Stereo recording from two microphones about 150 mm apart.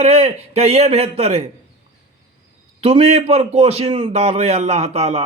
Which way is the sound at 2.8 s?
40° right (ahead or behind).